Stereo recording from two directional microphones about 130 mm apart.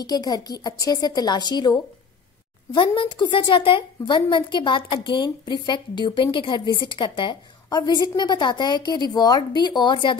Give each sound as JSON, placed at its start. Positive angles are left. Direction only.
{"t": 0.0, "sound": "a woman's voice", "side_deg": 30}